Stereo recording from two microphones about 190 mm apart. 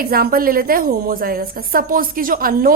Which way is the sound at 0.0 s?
50° right (ahead or behind).